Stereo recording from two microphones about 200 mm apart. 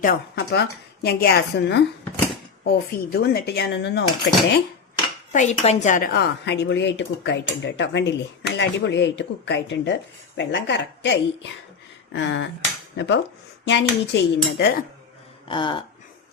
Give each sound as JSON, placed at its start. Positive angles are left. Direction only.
{"t": 0.0, "sound": "a woman's voice", "side_deg": 50}
{"t": 5.3, "sound": "a woman's voice", "side_deg": 35}
{"t": 13.7, "sound": "a woman's voice", "side_deg": 60}
{"t": 15.4, "sound": "a sound", "side_deg": 25}